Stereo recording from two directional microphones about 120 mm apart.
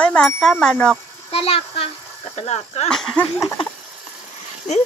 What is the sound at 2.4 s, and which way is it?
Speech, 65° left (ahead or behind).